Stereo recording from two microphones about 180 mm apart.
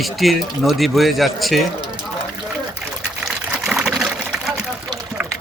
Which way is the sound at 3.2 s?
Centre (ahead or behind).